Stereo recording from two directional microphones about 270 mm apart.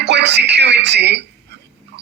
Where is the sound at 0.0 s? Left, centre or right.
Right.